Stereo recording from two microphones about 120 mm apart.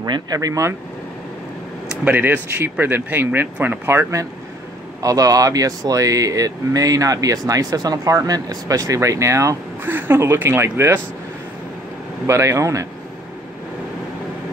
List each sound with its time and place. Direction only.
0.0 s speech: 35° right (ahead or behind)
2.0 s speech: 15° right (ahead or behind)
12.3 s speech: 25° right (ahead or behind)